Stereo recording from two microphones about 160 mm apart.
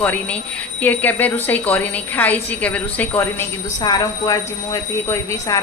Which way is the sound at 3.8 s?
25° left (ahead or behind).